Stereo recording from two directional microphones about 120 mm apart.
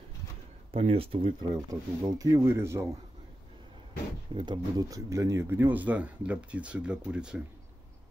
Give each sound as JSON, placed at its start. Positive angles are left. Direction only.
{"t": 0.7, "sound": "speech", "side_deg": -55}
{"t": 4.3, "sound": "speech", "side_deg": -50}
{"t": 4.7, "sound": "speech", "side_deg": -30}